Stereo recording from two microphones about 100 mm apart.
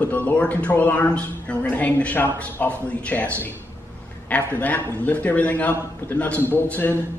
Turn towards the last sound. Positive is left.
turn(degrees=20)  # may be behind; listen again after turning